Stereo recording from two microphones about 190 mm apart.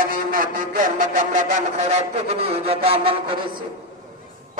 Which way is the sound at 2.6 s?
30° right (ahead or behind).